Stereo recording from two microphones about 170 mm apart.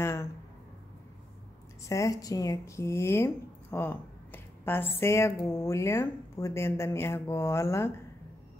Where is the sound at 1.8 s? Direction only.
20° left (ahead or behind).